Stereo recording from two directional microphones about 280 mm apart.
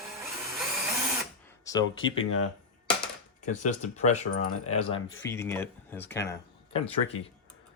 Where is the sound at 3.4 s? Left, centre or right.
Left.